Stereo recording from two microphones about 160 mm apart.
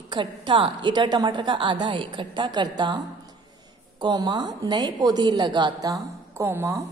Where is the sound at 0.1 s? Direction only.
30° right (ahead or behind).